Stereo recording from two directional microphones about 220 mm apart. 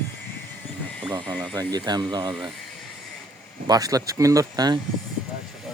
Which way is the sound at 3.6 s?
15° right (ahead or behind).